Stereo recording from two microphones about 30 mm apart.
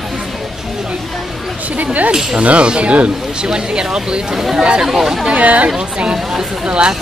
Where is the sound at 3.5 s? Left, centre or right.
Right.